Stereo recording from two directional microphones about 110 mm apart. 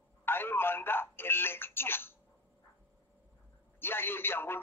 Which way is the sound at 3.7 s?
20° left (ahead or behind).